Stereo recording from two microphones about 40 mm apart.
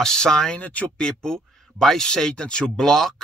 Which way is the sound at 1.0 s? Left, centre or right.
Centre.